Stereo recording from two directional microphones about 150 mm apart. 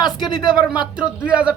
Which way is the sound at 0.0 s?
30° left (ahead or behind).